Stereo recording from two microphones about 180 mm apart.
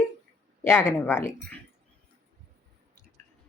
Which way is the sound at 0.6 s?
15° left (ahead or behind).